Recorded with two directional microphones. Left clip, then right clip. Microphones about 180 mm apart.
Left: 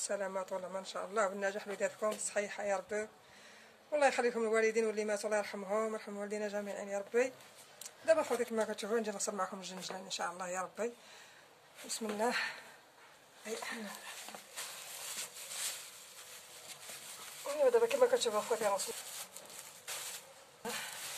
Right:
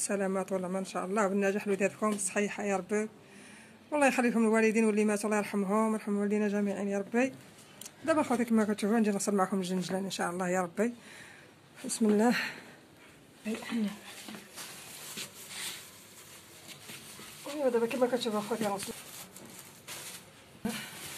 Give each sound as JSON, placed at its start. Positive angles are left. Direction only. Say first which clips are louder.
{"t": 0.1, "sound": "speech", "louder": "right 6 dB", "side_deg": -30}
{"t": 11.9, "sound": "speech", "louder": "right 7 dB", "side_deg": -35}
{"t": 13.5, "sound": "speech", "louder": "right 5 dB", "side_deg": 0}
{"t": 17.5, "sound": "speech", "louder": "even", "side_deg": 0}